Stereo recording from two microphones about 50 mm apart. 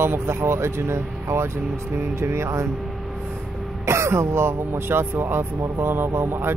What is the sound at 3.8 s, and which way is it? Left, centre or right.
Speech, right.